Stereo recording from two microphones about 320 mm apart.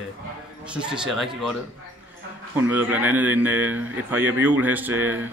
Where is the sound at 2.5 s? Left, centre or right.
Centre.